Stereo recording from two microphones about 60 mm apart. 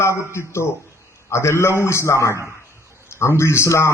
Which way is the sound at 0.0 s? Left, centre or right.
Left.